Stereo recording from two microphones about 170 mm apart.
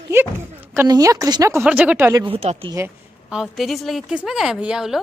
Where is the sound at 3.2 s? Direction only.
Centre (ahead or behind).